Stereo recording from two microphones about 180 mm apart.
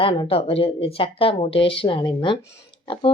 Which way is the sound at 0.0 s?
30° left (ahead or behind).